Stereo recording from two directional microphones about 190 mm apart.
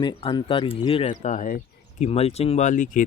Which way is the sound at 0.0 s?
30° left (ahead or behind).